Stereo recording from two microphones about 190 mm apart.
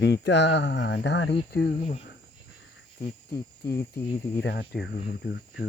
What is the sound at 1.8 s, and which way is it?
Speech, 35° left (ahead or behind).